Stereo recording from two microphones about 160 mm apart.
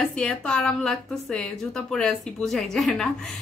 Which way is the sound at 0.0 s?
5° left (ahead or behind).